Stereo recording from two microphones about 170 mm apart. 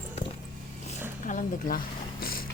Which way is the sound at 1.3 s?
50° left (ahead or behind).